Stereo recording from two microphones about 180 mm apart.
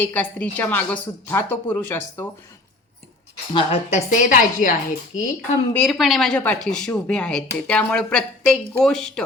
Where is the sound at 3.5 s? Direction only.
30° left (ahead or behind); by 5.2 s 50° left (ahead or behind).